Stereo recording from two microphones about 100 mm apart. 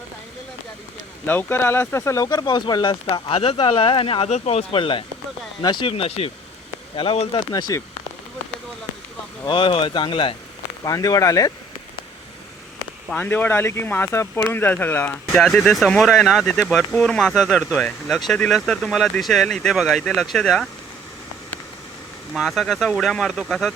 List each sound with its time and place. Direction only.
1.3 s speech: 20° left (ahead or behind)
2.2 s speech: 45° left (ahead or behind)
3.1 s speech: 70° left (ahead or behind)
5.6 s speech: 50° left (ahead or behind)
5.9 s speech: 80° left
7.3 s speech: 35° left (ahead or behind)
9.5 s speech: 60° left (ahead or behind)
10.8 s speech: 40° left (ahead or behind)
13.1 s speech: 20° left (ahead or behind)
15.4 s speech: 5° left (ahead or behind)
22.4 s speech: centre (ahead or behind)